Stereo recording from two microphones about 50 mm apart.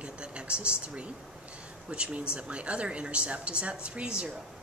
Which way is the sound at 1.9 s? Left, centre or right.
Right.